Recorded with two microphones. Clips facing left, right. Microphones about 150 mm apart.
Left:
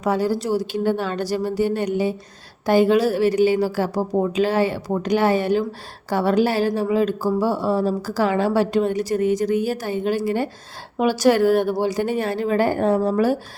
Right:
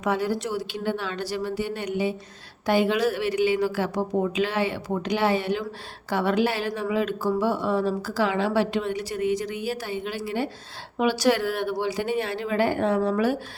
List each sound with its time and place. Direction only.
0.0 s a woman's voice: 35° left (ahead or behind)